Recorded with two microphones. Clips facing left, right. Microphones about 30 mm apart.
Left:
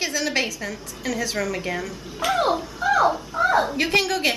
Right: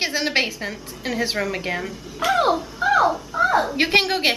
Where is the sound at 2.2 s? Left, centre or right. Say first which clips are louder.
Right 2 dB; centre.